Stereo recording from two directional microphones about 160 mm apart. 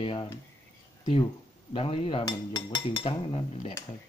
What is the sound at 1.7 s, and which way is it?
Dishes, 35° left (ahead or behind).